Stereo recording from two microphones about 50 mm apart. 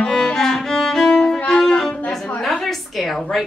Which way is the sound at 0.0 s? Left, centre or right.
Centre.